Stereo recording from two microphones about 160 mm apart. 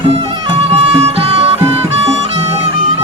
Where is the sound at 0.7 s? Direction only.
40° right (ahead or behind).